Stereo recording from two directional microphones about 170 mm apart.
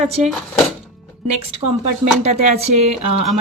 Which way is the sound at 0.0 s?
40° right (ahead or behind).